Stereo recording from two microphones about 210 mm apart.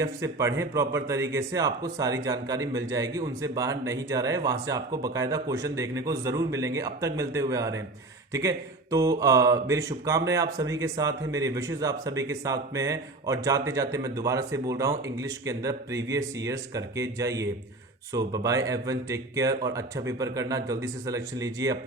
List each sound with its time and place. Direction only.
0.0 s speech: 15° right (ahead or behind)